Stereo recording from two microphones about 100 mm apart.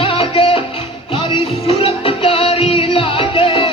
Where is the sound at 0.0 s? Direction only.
65° left (ahead or behind).